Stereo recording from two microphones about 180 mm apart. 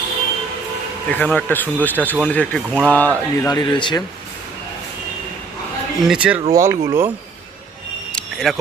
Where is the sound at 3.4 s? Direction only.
20° left (ahead or behind).